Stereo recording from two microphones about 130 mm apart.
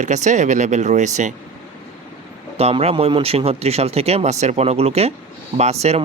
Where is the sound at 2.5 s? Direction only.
50° right (ahead or behind).